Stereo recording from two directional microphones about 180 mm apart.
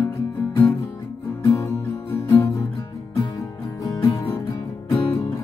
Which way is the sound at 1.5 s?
10° left (ahead or behind).